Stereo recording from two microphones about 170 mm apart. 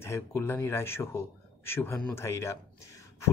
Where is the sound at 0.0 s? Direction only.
15° left (ahead or behind).